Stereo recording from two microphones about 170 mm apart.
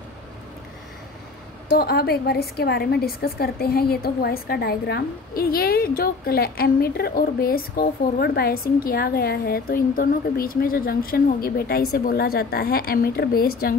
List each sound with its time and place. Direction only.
1.8 s a woman's voice: 65° left (ahead or behind)